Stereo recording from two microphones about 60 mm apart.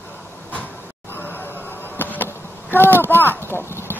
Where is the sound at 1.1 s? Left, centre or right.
Left.